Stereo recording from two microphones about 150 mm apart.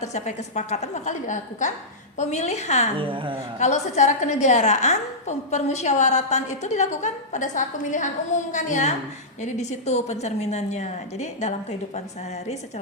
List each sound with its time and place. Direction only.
0.0 s a woman's voice: 50° left (ahead or behind)
3.0 s a woman's voice: 35° right (ahead or behind)
3.6 s a woman's voice: 50° left (ahead or behind)